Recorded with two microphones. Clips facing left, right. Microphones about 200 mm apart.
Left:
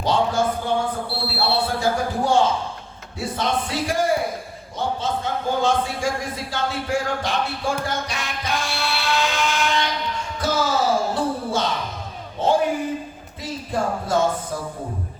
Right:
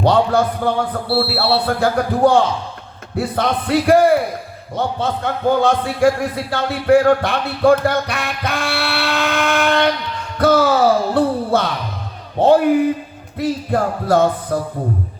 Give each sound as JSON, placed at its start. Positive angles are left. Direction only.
{"t": 0.0, "sound": "a sound", "side_deg": -60}
{"t": 1.1, "sound": "a man's voice", "side_deg": -60}
{"t": 10.3, "sound": "music", "side_deg": -60}
{"t": 12.4, "sound": "a man's voice", "side_deg": -60}